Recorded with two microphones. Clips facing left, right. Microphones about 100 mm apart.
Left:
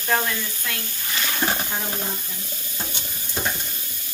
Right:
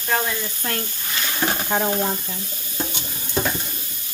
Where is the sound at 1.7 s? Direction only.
70° right (ahead or behind).